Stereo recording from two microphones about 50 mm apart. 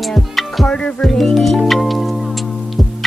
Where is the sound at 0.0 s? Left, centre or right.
Centre.